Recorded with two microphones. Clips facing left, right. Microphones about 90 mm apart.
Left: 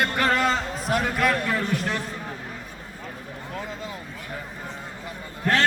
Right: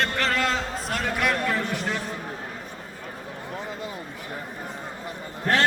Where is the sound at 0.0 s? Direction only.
10° left (ahead or behind).